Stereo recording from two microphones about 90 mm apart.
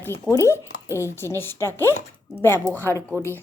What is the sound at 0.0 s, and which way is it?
Speech, 30° left (ahead or behind).